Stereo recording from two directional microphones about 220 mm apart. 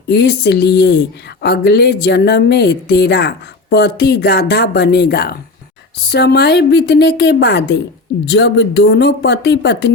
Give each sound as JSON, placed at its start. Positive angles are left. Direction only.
{"t": 0.1, "sound": "speech", "side_deg": 50}